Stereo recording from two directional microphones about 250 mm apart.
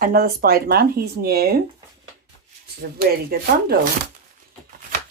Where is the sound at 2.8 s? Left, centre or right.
Right.